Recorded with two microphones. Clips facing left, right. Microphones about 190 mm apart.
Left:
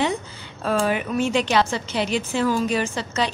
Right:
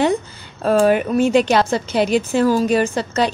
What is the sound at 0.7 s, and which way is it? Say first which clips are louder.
A woman's voice: right 7 dB; 45° right (ahead or behind).